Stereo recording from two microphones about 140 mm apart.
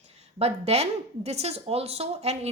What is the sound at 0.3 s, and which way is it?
A woman's voice, 45° right (ahead or behind).